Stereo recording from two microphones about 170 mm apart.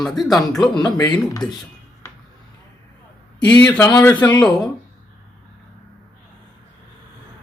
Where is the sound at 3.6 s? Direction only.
10° left (ahead or behind).